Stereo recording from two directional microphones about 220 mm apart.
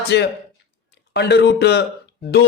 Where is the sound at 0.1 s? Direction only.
50° left (ahead or behind).